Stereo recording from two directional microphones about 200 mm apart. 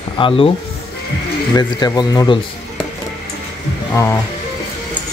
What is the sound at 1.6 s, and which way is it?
Speech, 20° left (ahead or behind).